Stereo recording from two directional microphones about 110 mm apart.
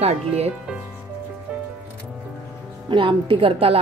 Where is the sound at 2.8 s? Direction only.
50° right (ahead or behind).